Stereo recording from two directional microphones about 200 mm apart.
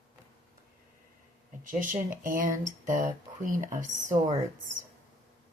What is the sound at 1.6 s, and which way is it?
Speech, 40° right (ahead or behind).